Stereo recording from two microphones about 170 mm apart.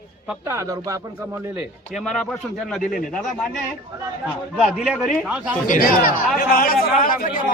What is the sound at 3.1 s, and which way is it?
A man's voice, centre (ahead or behind).